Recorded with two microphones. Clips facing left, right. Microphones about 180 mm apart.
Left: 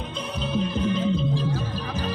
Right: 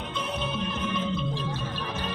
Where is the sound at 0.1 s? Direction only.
35° left (ahead or behind).